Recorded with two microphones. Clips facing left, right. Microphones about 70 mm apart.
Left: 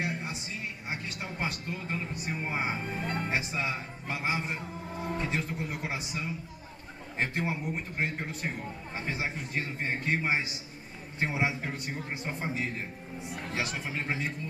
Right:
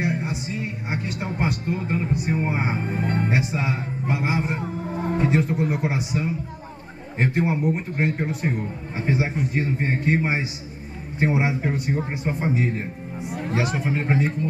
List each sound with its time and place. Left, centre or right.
0.0 s a sound: right
1.4 s a man's voice: right
4.4 s music: right
5.1 s a man's voice: right
13.7 s speech: right